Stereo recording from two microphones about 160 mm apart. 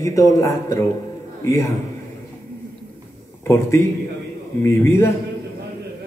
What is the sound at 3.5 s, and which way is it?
A man's voice, 20° left (ahead or behind).